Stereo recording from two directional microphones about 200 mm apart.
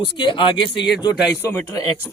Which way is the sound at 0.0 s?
25° left (ahead or behind).